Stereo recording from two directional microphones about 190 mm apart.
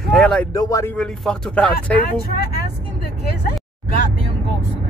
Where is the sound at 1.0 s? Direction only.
5° left (ahead or behind).